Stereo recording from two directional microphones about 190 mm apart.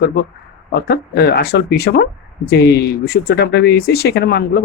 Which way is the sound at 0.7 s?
60° left (ahead or behind).